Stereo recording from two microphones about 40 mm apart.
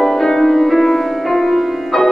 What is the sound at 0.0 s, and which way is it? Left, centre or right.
Music, centre.